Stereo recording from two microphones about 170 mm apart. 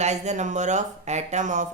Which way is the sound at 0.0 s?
40° right (ahead or behind).